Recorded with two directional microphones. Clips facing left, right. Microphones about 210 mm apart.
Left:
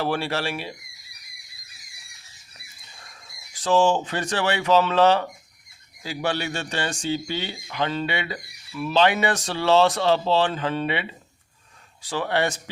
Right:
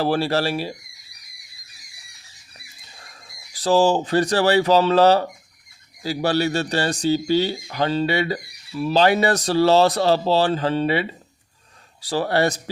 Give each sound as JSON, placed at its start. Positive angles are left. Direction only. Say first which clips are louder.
{"t": 0.0, "sound": "speech", "louder": "right 5 dB", "side_deg": -35}
{"t": 3.5, "sound": "speech", "louder": "right 3 dB", "side_deg": -35}